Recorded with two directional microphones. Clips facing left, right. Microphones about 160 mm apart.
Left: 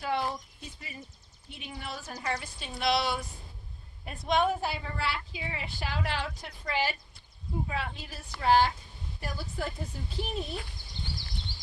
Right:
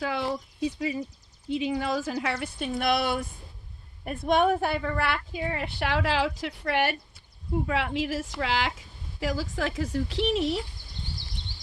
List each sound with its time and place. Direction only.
0.0 s speech: 90° right
1.5 s a woman's voice: 90° right; by 6.9 s 65° right (ahead or behind)
7.7 s a woman's voice: 85° right